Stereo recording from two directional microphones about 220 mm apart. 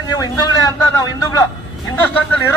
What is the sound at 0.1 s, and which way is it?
A man's voice, 15° left (ahead or behind).